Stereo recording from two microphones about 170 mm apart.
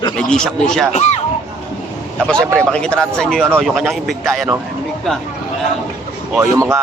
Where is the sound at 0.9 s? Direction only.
40° left (ahead or behind).